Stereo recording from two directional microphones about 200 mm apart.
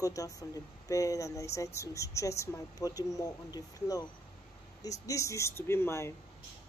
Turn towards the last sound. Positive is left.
turn(degrees=15)  # may be behind; listen again after turning